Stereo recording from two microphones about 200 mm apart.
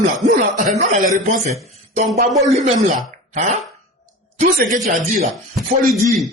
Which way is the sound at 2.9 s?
40° right (ahead or behind).